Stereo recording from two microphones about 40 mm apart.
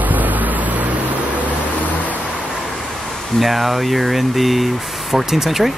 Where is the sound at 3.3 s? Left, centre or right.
Centre.